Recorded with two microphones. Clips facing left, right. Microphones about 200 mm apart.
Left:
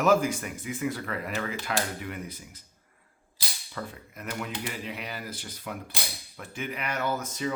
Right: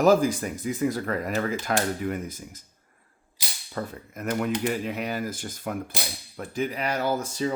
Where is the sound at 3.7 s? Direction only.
45° right (ahead or behind).